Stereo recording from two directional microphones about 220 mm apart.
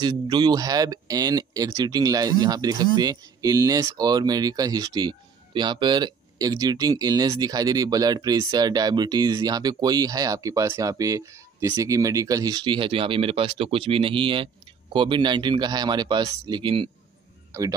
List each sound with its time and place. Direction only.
0.0 s speech: 20° right (ahead or behind)